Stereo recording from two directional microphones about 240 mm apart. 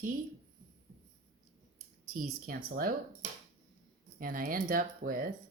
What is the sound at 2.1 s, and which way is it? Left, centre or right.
Speech, right.